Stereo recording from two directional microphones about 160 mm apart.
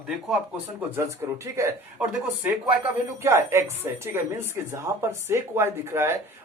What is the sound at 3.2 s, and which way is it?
Speech, 15° right (ahead or behind).